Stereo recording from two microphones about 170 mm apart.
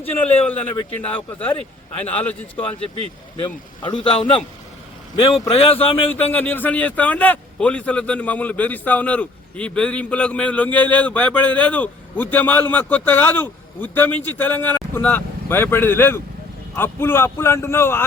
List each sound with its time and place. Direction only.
0.0 s a man's voice: 10° left (ahead or behind)
3.4 s speech: 30° left (ahead or behind)
5.3 s speech: 35° left (ahead or behind)
6.3 s a man's voice: 10° left (ahead or behind)